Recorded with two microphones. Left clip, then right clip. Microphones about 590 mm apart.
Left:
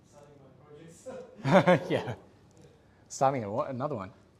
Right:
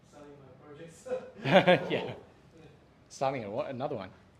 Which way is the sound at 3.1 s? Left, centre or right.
Left.